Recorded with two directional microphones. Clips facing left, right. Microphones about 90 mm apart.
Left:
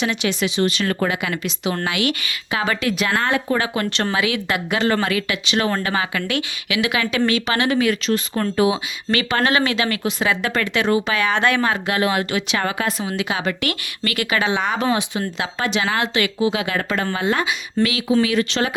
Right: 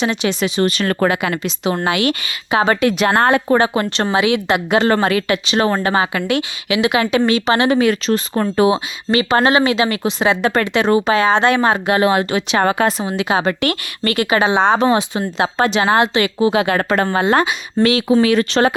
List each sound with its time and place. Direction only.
0.0 s speech: 30° right (ahead or behind); by 1.2 s 55° right (ahead or behind)
1.2 s speech: 35° right (ahead or behind)
3.6 s speech: 25° right (ahead or behind)
4.9 s speech: 40° right (ahead or behind)
9.0 s speech: 25° right (ahead or behind); by 13.1 s 40° right (ahead or behind)
13.1 s a woman's voice: 30° right (ahead or behind); by 17.5 s 55° right (ahead or behind)
17.5 s speech: 35° right (ahead or behind)